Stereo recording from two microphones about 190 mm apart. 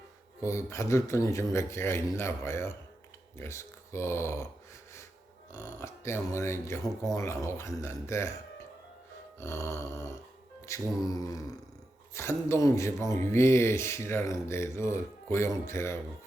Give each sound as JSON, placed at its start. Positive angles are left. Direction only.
{"t": 0.4, "sound": "speech", "side_deg": 15}
{"t": 5.8, "sound": "speech", "side_deg": 15}
{"t": 9.4, "sound": "speech", "side_deg": 15}